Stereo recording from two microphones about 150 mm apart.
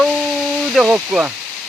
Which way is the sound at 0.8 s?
10° right (ahead or behind).